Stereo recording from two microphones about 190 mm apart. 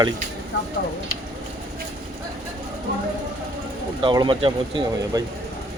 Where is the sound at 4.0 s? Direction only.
25° right (ahead or behind).